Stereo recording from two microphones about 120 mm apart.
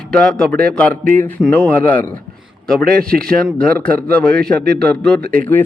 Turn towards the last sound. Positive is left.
turn(degrees=15)  # may be behind; listen again after turning